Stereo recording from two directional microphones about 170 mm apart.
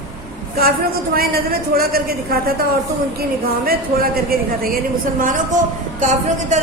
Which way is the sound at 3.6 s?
60° right (ahead or behind).